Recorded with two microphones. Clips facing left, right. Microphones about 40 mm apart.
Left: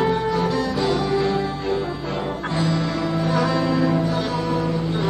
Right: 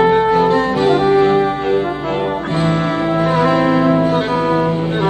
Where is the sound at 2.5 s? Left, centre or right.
Right.